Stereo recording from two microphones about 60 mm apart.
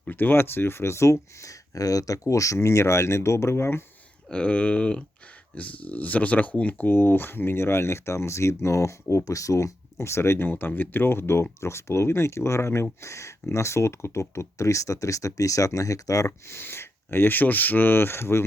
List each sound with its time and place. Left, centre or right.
0.1 s speech: left
4.3 s speech: centre; by 16.3 s left
16.5 s speech: left